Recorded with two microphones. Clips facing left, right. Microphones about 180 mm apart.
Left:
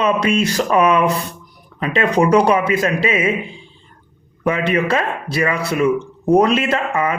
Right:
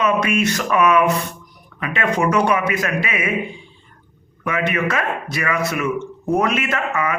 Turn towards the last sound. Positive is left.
turn(degrees=30)  # may be behind; listen again after turning